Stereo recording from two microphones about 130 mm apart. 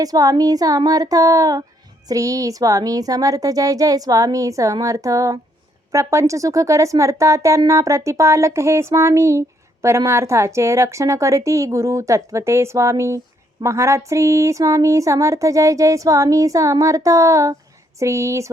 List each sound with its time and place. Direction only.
0.0 s a woman's voice: 30° right (ahead or behind)